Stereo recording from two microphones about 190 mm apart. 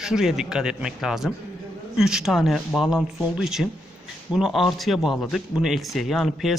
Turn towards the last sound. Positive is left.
turn(degrees=0)  # may be behind; listen again after turning